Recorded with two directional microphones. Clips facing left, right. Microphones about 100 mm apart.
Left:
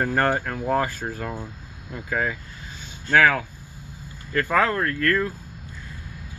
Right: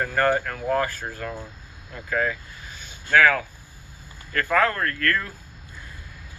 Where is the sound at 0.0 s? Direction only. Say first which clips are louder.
Even; 30° left (ahead or behind).